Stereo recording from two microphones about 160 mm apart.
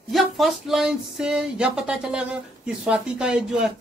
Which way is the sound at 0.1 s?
Centre (ahead or behind).